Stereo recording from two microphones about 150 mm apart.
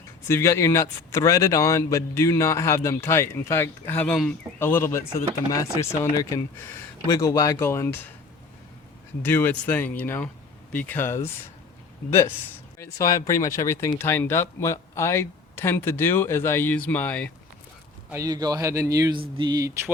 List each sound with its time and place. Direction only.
0.3 s a man's voice: 20° left (ahead or behind)
9.2 s speech: 15° left (ahead or behind)
12.8 s speech: 20° left (ahead or behind)
18.1 s a man's voice: 20° right (ahead or behind)